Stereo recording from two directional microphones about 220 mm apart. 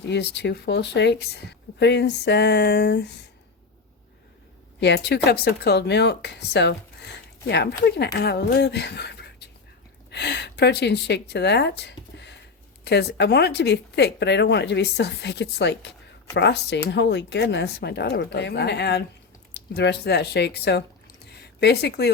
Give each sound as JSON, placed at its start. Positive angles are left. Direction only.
{"t": 0.1, "sound": "speech", "side_deg": 50}
{"t": 4.8, "sound": "speech", "side_deg": 50}